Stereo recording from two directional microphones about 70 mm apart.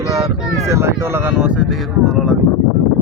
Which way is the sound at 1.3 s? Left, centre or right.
Centre.